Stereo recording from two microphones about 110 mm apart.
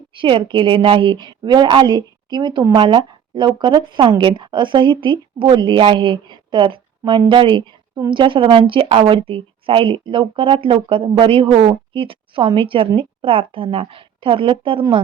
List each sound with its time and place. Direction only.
0.1 s speech: 50° right (ahead or behind)